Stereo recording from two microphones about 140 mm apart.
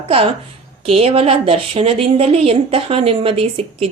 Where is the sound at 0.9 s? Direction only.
45° right (ahead or behind).